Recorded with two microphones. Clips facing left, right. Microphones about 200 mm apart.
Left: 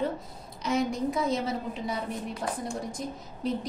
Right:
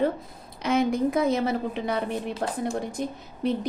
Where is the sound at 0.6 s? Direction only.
55° right (ahead or behind).